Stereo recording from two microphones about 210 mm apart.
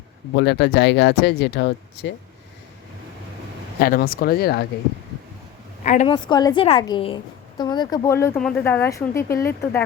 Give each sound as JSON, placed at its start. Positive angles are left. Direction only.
{"t": 0.3, "sound": "speech", "side_deg": 55}
{"t": 3.8, "sound": "speech", "side_deg": 45}
{"t": 5.8, "sound": "a woman's voice", "side_deg": 35}
{"t": 6.1, "sound": "a woman's voice", "side_deg": 20}